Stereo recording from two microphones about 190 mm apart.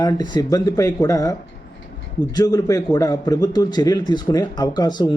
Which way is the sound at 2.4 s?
20° left (ahead or behind).